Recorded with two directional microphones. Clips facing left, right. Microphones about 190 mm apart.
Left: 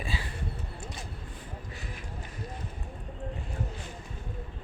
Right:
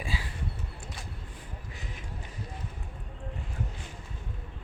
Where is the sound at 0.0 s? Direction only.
10° right (ahead or behind).